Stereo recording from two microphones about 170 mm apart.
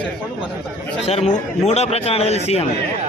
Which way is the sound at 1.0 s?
40° left (ahead or behind).